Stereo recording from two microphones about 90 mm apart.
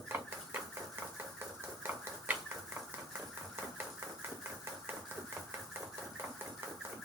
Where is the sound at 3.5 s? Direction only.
25° right (ahead or behind).